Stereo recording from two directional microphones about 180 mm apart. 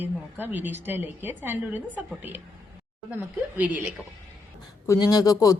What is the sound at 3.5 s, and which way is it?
Speech, 10° right (ahead or behind).